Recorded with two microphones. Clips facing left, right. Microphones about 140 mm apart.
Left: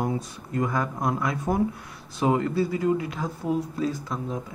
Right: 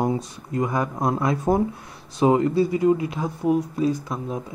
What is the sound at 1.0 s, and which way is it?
Speech, 25° right (ahead or behind).